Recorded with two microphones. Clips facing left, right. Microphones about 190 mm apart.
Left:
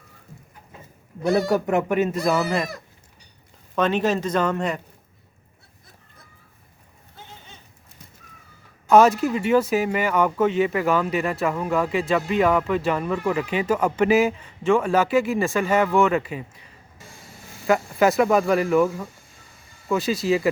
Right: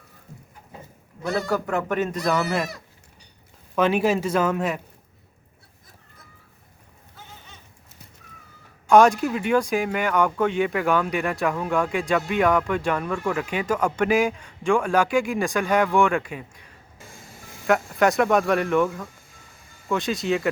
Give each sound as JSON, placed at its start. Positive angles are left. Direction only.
{"t": 1.3, "sound": "speech", "side_deg": 20}
{"t": 1.9, "sound": "speech", "side_deg": 10}
{"t": 3.8, "sound": "speech", "side_deg": -10}
{"t": 8.9, "sound": "speech", "side_deg": 5}
{"t": 17.7, "sound": "speech", "side_deg": 0}